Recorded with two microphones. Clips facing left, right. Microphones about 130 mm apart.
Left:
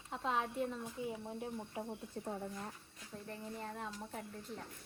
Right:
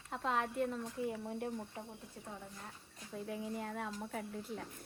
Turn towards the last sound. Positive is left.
turn(degrees=0)  # may be behind; listen again after turning